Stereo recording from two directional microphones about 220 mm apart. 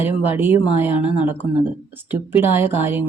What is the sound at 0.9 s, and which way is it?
Speech, 25° left (ahead or behind).